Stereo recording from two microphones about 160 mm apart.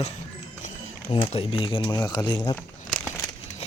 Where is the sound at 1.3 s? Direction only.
35° left (ahead or behind).